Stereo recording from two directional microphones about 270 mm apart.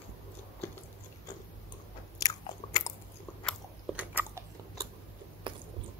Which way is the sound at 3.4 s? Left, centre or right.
Centre.